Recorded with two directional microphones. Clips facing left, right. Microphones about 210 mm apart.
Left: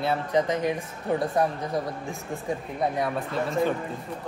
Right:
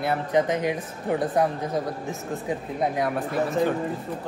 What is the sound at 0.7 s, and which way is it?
Speech, centre (ahead or behind).